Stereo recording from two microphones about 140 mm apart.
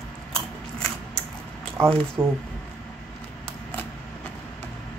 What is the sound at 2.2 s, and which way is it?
Speech, 15° right (ahead or behind).